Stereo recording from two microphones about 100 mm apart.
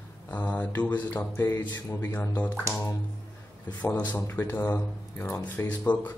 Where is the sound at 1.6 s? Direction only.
45° left (ahead or behind).